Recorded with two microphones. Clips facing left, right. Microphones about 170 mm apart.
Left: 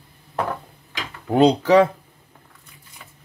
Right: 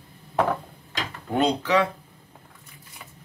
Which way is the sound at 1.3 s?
35° left (ahead or behind).